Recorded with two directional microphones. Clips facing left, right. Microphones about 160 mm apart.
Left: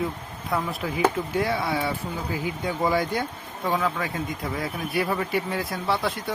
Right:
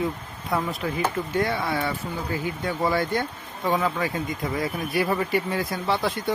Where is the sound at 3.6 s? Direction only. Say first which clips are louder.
Right 2 dB; centre (ahead or behind).